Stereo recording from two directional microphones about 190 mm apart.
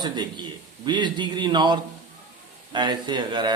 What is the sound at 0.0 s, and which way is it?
Speech, 25° right (ahead or behind).